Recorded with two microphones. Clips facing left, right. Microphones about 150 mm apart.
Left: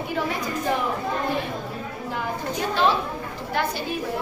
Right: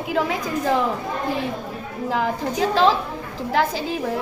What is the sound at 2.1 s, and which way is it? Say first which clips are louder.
Speech: right 6 dB; 90° right.